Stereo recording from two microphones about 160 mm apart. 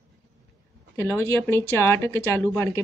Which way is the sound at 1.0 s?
15° left (ahead or behind).